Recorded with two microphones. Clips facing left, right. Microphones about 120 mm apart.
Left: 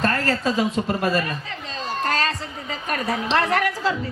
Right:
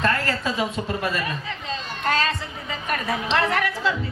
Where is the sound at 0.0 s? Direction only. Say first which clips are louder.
Left 2 dB; 40° left (ahead or behind).